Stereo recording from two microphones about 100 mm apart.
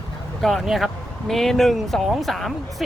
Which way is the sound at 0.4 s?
Centre (ahead or behind).